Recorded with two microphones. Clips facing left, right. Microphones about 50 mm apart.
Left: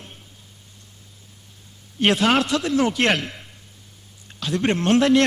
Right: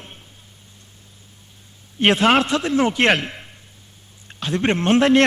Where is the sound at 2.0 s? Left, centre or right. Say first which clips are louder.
Right 3 dB; right.